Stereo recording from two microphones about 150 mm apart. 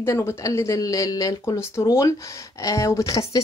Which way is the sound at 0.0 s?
20° left (ahead or behind).